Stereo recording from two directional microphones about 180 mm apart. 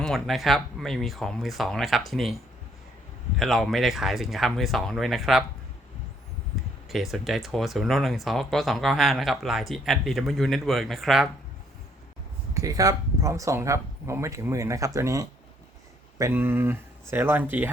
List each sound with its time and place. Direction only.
0.0 s speech: centre (ahead or behind)
6.9 s speech: centre (ahead or behind)
12.5 s speech: 20° right (ahead or behind)